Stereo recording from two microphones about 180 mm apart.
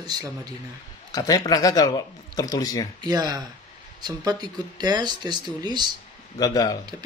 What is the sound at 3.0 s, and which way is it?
Speech, 20° right (ahead or behind).